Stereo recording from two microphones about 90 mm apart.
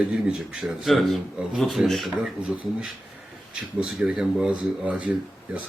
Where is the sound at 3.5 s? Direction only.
5° right (ahead or behind).